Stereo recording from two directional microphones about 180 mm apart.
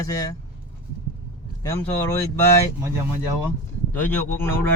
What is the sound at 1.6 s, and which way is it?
Speech, 15° left (ahead or behind).